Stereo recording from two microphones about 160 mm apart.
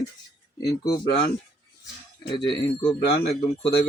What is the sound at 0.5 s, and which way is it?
Speech, 20° left (ahead or behind).